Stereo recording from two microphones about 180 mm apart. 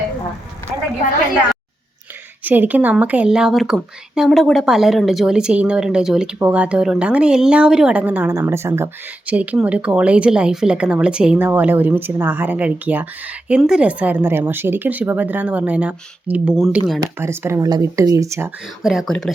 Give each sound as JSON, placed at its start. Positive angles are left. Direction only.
{"t": 2.4, "sound": "speech", "side_deg": -10}
{"t": 17.0, "sound": "speech", "side_deg": -15}
{"t": 18.8, "sound": "speech", "side_deg": 0}